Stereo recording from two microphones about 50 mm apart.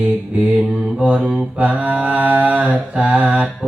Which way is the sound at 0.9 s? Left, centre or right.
Centre.